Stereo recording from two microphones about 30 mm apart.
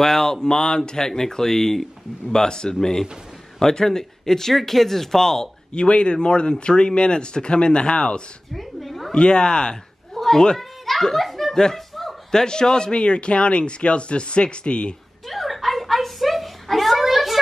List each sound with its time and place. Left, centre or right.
0.0 s speech: centre
2.3 s speech: left
5.7 s a man's voice: left
8.5 s cat: centre
9.1 s a man's voice: left
10.1 s cat: centre
11.1 s a sound: centre
11.5 s speech: centre
11.9 s a sound: centre
12.3 s a man's voice: left
15.2 s a sound: centre